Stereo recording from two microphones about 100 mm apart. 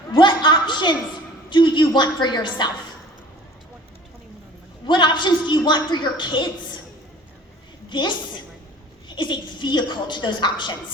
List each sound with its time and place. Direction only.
0.1 s a woman's voice: 50° left (ahead or behind)
4.9 s a woman's voice: 50° left (ahead or behind)
7.9 s a woman's voice: 50° left (ahead or behind)